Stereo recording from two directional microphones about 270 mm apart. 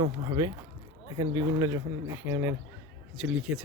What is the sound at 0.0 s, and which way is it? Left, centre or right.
Speech, centre.